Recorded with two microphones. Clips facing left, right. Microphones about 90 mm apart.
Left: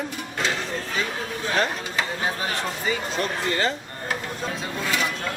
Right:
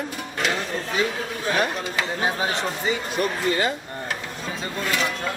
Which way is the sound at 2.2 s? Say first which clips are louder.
Right 3 dB; 20° right (ahead or behind).